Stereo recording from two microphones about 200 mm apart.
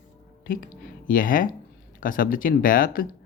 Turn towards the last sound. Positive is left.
turn(degrees=45)  # may be behind; listen again after turning